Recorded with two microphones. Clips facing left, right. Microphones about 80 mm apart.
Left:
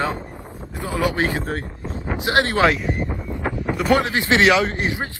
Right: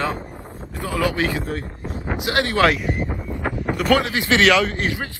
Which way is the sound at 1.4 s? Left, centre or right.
Left.